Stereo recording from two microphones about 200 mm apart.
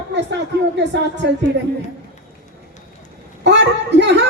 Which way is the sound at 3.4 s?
60° right (ahead or behind).